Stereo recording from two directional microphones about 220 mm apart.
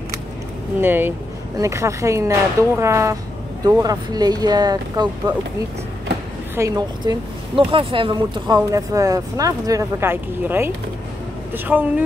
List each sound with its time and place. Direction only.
0.7 s speech: 10° right (ahead or behind)
6.5 s speech: 15° right (ahead or behind)